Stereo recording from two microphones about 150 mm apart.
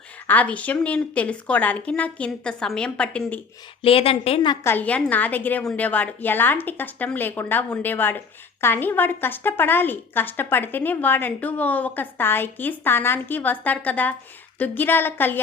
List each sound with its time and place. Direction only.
0.3 s a woman's voice: 10° left (ahead or behind)
3.8 s a woman's voice: 40° left (ahead or behind)
4.6 s a woman's voice: 10° left (ahead or behind)